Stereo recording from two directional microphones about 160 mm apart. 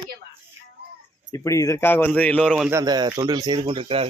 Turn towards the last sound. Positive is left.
turn(degrees=-35)  # may be behind; listen again after turning